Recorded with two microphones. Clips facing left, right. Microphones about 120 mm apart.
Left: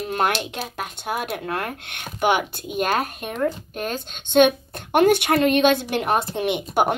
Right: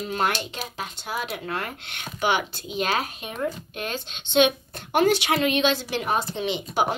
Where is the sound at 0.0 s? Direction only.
55° left (ahead or behind).